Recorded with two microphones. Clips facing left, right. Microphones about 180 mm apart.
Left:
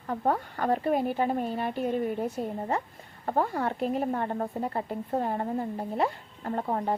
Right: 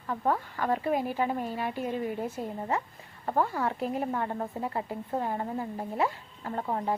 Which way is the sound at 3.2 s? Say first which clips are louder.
Left 1 dB; 35° left (ahead or behind).